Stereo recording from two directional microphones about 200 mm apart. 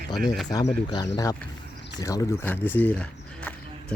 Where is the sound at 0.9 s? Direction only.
20° left (ahead or behind).